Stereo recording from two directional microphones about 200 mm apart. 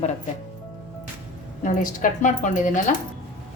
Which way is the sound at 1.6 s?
40° left (ahead or behind).